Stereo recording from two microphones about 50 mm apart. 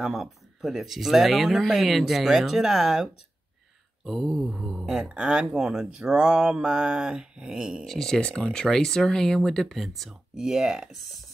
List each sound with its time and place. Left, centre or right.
0.0 s speech: centre
4.1 s speech: centre
7.8 s speech: centre
8.2 s speech: left
8.5 s speech: centre